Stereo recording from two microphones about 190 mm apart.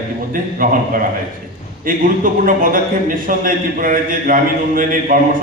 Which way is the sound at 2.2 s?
45° right (ahead or behind).